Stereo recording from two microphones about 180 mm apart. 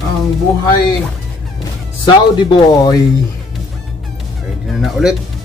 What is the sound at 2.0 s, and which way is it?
Speech, 25° left (ahead or behind).